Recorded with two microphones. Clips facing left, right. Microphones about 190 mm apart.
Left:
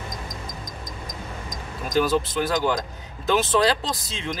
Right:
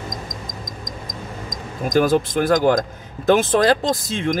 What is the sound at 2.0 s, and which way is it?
Speech, 50° right (ahead or behind).